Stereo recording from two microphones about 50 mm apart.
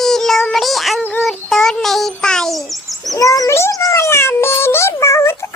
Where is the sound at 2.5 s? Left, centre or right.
Centre.